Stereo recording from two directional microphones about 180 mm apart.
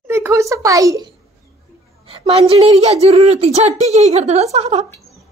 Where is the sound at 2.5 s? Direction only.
35° right (ahead or behind).